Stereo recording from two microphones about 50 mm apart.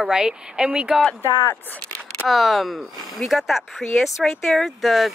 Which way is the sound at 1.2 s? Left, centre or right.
Left.